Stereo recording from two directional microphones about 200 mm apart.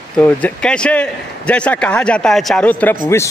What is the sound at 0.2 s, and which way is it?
A man's voice, 5° left (ahead or behind).